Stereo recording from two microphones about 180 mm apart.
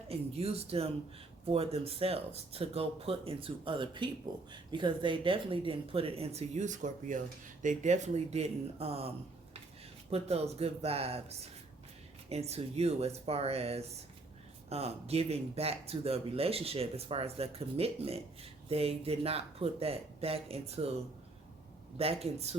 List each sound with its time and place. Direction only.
0.1 s speech: 35° right (ahead or behind)
21.9 s speech: 35° right (ahead or behind)